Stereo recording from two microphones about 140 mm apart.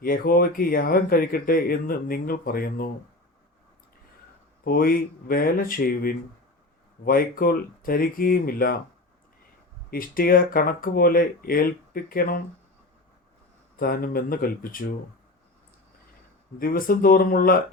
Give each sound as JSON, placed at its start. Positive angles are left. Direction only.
{"t": 0.0, "sound": "speech", "side_deg": 90}
{"t": 4.6, "sound": "speech", "side_deg": 90}
{"t": 9.9, "sound": "speech", "side_deg": 90}
{"t": 13.7, "sound": "speech", "side_deg": 90}
{"t": 16.6, "sound": "speech", "side_deg": 90}